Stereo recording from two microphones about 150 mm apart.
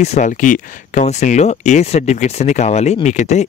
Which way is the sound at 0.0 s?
50° left (ahead or behind).